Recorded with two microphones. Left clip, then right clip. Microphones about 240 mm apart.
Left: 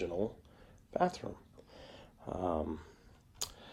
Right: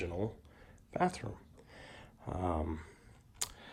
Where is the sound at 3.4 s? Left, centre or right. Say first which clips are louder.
Even; centre.